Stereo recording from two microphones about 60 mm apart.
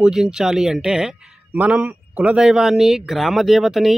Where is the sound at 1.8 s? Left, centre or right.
Right.